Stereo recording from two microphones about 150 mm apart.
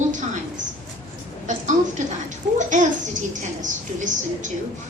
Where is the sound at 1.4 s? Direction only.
55° right (ahead or behind).